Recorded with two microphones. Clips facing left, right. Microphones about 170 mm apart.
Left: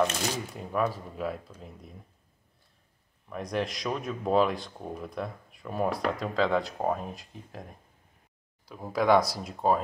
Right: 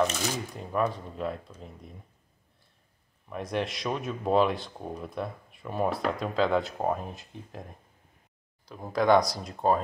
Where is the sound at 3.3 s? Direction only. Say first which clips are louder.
Even; centre (ahead or behind).